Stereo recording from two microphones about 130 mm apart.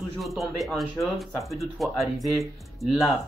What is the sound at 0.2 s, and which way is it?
Speech, centre (ahead or behind).